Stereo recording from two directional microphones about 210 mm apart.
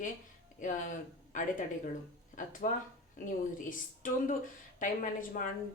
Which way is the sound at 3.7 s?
40° left (ahead or behind).